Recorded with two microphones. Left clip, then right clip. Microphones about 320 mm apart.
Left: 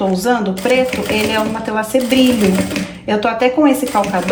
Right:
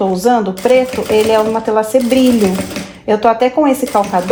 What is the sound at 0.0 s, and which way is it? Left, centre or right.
Speech, right.